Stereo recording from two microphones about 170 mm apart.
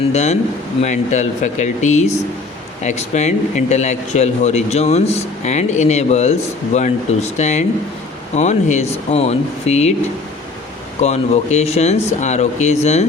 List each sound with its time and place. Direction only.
0.1 s speech: 40° left (ahead or behind)
11.0 s speech: 40° left (ahead or behind)